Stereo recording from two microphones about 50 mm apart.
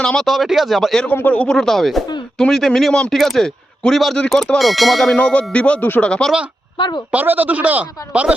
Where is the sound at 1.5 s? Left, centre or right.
Centre.